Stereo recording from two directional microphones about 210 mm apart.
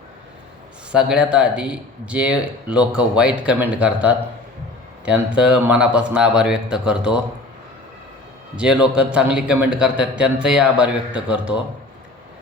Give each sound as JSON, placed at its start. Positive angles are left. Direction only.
{"t": 0.9, "sound": "speech", "side_deg": -5}
{"t": 5.4, "sound": "speech", "side_deg": -5}
{"t": 8.5, "sound": "speech", "side_deg": -5}